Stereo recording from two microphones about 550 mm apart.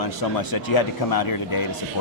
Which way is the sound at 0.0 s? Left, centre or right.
Left.